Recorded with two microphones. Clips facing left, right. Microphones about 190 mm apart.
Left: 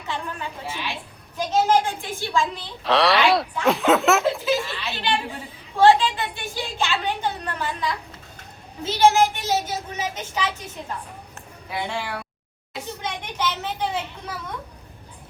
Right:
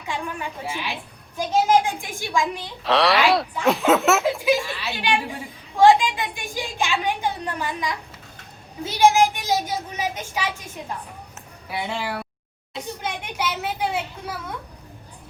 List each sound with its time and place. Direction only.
0.1 s a woman's voice: 15° right (ahead or behind)
2.8 s speech: centre (ahead or behind)
4.4 s a woman's voice: 15° right (ahead or behind)
13.0 s a sound: 10° right (ahead or behind)